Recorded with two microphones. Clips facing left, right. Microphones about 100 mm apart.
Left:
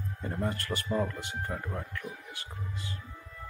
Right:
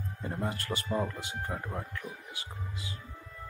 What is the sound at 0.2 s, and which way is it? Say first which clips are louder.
Speech: left 1 dB; 15° right (ahead or behind).